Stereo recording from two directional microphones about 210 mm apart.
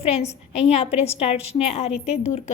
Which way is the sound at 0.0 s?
30° left (ahead or behind).